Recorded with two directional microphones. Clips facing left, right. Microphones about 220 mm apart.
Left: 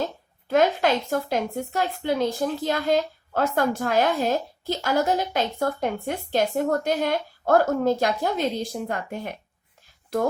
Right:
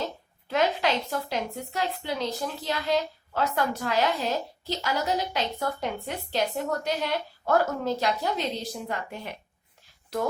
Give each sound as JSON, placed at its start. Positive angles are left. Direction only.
{"t": 0.4, "sound": "a woman's voice", "side_deg": 50}